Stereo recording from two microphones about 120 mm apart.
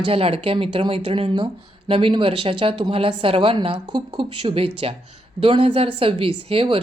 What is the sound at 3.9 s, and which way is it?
Speech, 35° right (ahead or behind).